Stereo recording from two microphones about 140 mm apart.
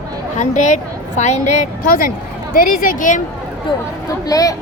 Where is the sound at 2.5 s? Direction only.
85° left; by 3.2 s 70° left (ahead or behind).